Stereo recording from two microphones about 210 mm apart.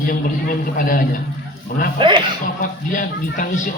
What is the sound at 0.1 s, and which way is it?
Speech, 40° left (ahead or behind).